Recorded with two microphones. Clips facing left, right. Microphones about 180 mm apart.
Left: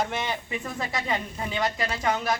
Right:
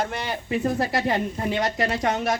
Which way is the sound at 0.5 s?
40° right (ahead or behind).